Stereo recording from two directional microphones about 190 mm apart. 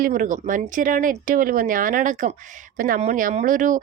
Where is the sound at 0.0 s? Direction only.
45° right (ahead or behind).